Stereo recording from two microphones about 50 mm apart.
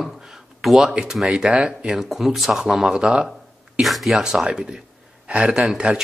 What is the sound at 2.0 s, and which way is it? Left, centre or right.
Speech, centre.